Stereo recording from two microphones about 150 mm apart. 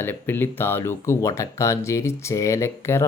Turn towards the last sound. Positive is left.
turn(degrees=15)  # may be behind; listen again after turning